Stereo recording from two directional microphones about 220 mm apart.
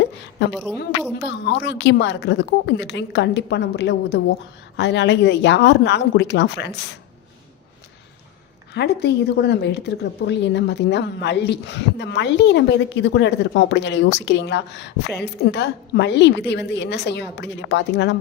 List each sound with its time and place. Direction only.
0.5 s a woman's voice: 5° right (ahead or behind)
1.2 s a woman's voice: 55° left (ahead or behind)
8.7 s a woman's voice: 50° left (ahead or behind)